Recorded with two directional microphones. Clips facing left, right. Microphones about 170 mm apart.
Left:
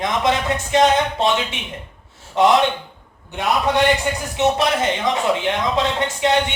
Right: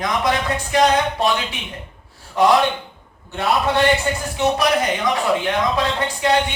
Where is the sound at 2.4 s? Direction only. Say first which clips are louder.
Left 1 dB; 20° left (ahead or behind).